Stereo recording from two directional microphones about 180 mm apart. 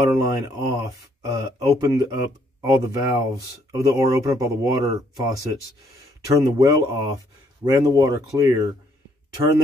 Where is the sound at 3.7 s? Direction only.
20° right (ahead or behind).